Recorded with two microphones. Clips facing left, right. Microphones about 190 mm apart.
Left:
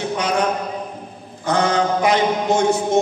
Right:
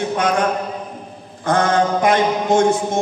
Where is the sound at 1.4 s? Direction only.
55° right (ahead or behind).